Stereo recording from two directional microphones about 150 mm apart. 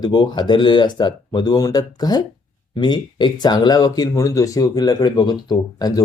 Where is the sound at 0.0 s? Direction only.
30° left (ahead or behind).